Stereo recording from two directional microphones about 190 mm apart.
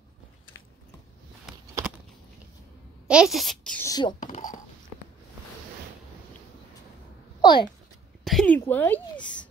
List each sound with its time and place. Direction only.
3.1 s a child's voice: 5° right (ahead or behind)
3.8 s speech: 20° left (ahead or behind)
4.2 s speech: 40° left (ahead or behind)
7.4 s speech: 25° left (ahead or behind)
8.2 s a sound: centre (ahead or behind)
8.5 s speech: 10° left (ahead or behind)